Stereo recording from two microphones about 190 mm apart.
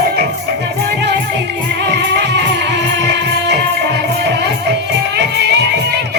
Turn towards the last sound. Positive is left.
turn(degrees=-65)  # may be behind; listen again after turning